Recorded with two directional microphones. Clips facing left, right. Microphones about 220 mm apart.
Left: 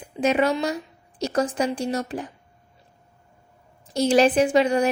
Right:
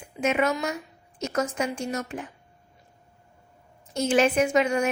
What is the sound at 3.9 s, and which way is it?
A woman's voice, 35° left (ahead or behind).